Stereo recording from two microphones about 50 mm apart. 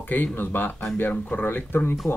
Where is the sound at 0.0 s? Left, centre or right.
Left.